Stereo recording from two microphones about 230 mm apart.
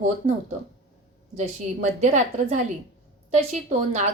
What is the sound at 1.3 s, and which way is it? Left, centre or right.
A woman's voice, right.